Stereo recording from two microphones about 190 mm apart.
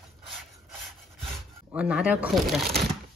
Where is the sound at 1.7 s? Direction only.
5° right (ahead or behind).